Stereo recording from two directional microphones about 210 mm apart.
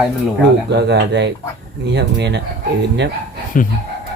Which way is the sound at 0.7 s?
55° right (ahead or behind).